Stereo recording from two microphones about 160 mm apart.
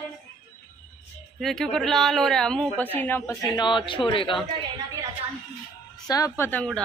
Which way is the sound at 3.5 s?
30° left (ahead or behind).